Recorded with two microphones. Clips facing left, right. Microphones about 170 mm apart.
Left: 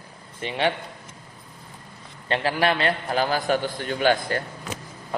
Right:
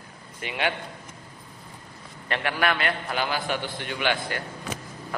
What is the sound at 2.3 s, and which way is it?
A man's voice, 30° left (ahead or behind).